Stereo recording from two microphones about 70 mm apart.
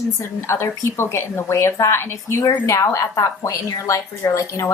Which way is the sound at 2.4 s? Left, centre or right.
Left.